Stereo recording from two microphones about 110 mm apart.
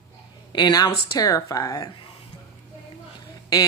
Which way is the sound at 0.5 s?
40° left (ahead or behind).